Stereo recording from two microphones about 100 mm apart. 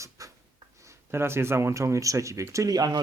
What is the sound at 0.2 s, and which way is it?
Writing, 35° right (ahead or behind).